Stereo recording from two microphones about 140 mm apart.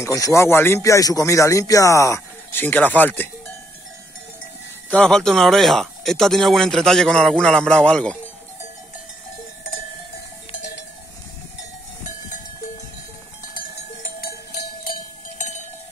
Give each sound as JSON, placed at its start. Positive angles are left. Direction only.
{"t": 0.0, "sound": "speech", "side_deg": 20}
{"t": 4.9, "sound": "speech", "side_deg": 5}
{"t": 14.9, "sound": "cowbell", "side_deg": 75}